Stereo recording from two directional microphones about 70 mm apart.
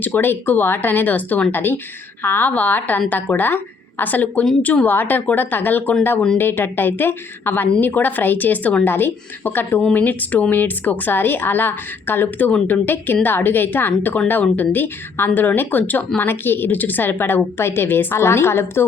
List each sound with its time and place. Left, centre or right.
0.0 s a woman's voice: left